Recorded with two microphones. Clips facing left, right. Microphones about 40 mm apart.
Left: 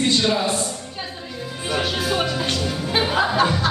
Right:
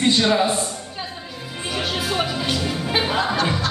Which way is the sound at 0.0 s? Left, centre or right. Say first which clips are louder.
Right 2 dB; centre.